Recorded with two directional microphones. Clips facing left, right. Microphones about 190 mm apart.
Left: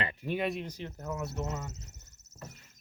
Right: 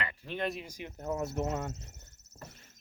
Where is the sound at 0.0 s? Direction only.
25° left (ahead or behind).